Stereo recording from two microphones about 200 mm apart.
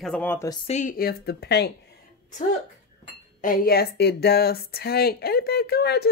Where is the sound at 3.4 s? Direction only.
50° left (ahead or behind).